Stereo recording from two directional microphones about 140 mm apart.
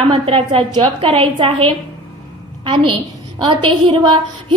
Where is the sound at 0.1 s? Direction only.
40° right (ahead or behind).